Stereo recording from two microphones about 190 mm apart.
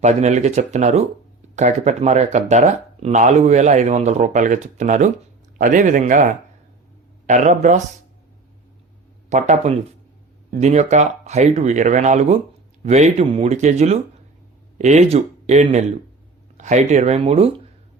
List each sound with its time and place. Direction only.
0.0 s speech: 35° right (ahead or behind)
9.3 s speech: 40° right (ahead or behind)